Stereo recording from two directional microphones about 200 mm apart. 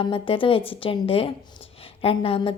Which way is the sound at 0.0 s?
25° left (ahead or behind).